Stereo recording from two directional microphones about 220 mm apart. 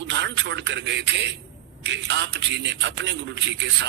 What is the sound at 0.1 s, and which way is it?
A man's voice, 55° right (ahead or behind).